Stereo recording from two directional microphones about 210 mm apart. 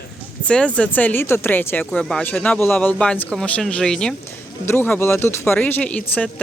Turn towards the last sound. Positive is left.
turn(degrees=5)  # may be behind; listen again after turning